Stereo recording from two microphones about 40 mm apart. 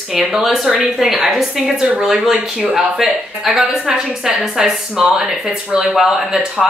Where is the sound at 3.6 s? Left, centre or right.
Right.